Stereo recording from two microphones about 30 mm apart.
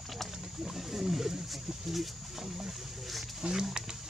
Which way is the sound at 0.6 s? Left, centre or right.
Centre.